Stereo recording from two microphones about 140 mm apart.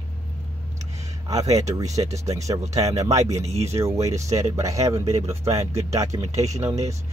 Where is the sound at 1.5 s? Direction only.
25° right (ahead or behind).